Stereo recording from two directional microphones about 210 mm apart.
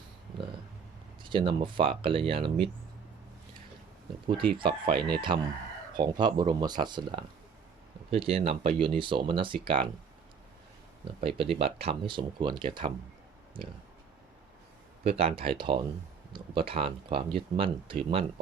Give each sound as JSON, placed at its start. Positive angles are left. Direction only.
{"t": 1.2, "sound": "speech", "side_deg": -20}
{"t": 4.3, "sound": "speech", "side_deg": -25}
{"t": 11.2, "sound": "speech", "side_deg": -25}
{"t": 15.0, "sound": "speech", "side_deg": -30}